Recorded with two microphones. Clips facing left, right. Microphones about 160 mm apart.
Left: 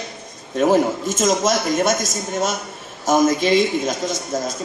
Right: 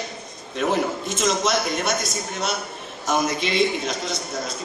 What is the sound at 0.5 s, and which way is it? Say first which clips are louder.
A man's voice: left 6 dB; 45° left (ahead or behind).